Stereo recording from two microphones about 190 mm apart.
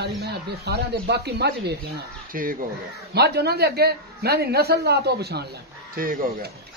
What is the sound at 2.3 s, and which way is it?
Speech, 45° right (ahead or behind).